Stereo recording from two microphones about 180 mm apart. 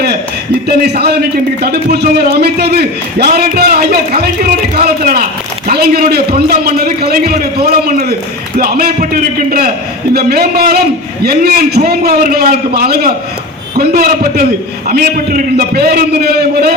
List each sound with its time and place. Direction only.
0.9 s a man's voice: 65° right (ahead or behind)